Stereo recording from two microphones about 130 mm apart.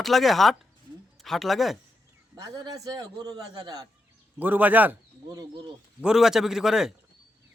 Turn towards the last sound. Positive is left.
turn(degrees=-5)  # may be behind; listen again after turning